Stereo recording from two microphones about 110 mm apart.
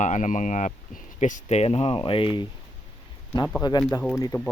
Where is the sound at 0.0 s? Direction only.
90° left; by 2.0 s 70° left (ahead or behind).